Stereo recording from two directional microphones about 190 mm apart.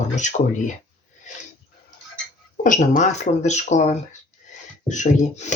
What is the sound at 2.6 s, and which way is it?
Speech, 40° left (ahead or behind).